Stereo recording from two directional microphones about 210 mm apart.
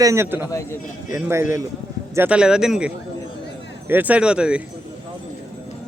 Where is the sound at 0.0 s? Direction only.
15° right (ahead or behind).